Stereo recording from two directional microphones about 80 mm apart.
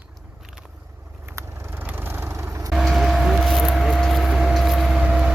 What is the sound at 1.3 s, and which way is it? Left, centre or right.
Vehicle, right.